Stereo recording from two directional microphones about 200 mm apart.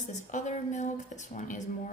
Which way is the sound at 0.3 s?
40° left (ahead or behind).